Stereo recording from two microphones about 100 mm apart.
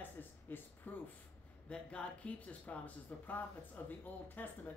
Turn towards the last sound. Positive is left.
turn(degrees=20)  # may be behind; listen again after turning